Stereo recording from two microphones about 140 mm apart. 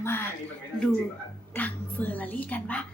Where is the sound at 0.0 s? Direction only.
15° left (ahead or behind).